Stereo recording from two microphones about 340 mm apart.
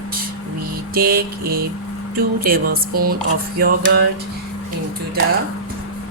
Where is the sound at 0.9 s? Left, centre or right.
Right.